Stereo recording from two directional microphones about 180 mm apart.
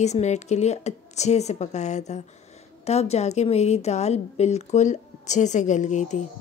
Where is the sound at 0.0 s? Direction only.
40° left (ahead or behind).